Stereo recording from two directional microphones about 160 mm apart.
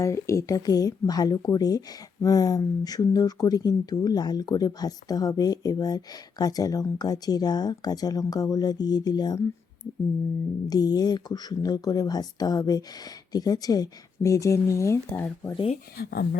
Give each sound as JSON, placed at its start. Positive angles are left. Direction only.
{"t": 0.0, "sound": "speech", "side_deg": 20}
{"t": 10.7, "sound": "speech", "side_deg": 25}
{"t": 16.0, "sound": "speech", "side_deg": 70}